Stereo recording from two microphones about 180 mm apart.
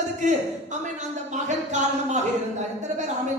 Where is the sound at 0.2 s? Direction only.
40° right (ahead or behind).